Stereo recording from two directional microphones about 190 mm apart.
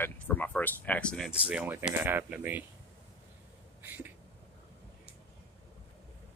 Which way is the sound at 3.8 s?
10° right (ahead or behind).